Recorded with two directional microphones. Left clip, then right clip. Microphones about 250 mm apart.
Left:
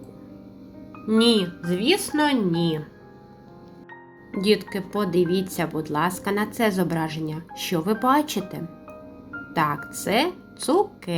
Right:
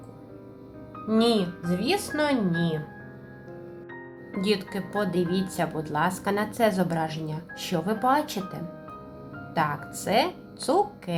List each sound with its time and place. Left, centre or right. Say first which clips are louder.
1.0 s a woman's voice: left 3 dB; centre
4.4 s a woman's voice: left 5 dB; centre